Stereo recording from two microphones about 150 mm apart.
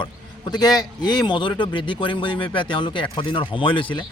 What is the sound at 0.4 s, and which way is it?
Speech, 25° left (ahead or behind).